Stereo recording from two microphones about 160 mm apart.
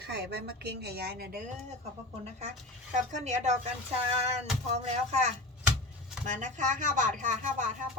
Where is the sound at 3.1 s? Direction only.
45° right (ahead or behind).